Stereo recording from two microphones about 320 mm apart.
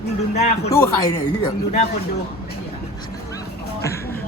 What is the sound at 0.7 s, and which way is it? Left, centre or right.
Speech, centre.